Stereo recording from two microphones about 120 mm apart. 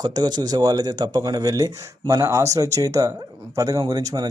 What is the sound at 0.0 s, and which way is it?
Speech, 35° right (ahead or behind).